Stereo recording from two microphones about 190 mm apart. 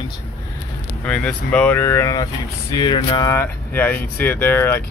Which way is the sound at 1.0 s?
5° left (ahead or behind).